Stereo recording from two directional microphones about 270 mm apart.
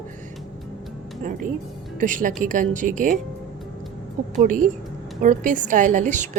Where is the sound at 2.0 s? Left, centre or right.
Right.